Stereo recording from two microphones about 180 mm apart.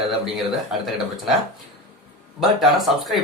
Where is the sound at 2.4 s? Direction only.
Centre (ahead or behind).